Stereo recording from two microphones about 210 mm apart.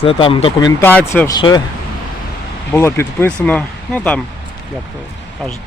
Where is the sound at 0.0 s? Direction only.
25° left (ahead or behind).